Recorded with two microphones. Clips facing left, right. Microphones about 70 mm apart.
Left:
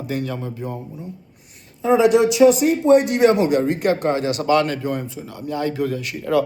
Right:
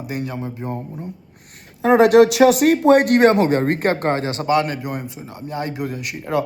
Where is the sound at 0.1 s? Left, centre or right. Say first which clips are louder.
Left 1 dB; right.